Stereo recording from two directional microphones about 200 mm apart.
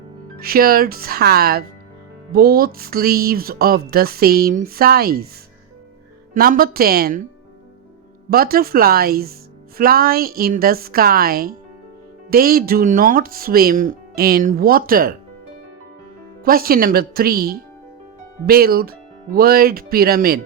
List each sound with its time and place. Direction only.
0.3 s speech: 50° right (ahead or behind)
6.3 s speech: 45° right (ahead or behind)
8.3 s speech: 50° right (ahead or behind)
16.4 s speech: 45° right (ahead or behind)